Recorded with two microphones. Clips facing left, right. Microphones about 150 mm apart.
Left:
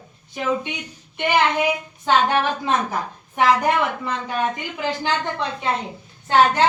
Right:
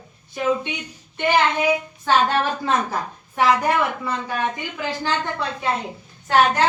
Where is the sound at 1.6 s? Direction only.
20° left (ahead or behind).